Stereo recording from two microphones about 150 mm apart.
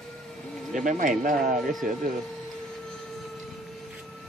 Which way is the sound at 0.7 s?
60° right (ahead or behind).